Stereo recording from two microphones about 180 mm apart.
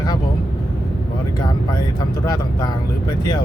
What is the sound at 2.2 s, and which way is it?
Speech, 20° left (ahead or behind).